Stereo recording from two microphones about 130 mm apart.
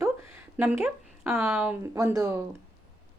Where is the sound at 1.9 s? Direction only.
25° right (ahead or behind).